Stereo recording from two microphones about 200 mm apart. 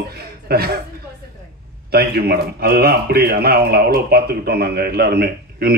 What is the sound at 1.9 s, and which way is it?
A man's voice, 50° right (ahead or behind).